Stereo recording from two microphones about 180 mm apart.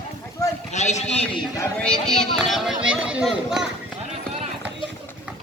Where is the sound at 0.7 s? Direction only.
40° left (ahead or behind).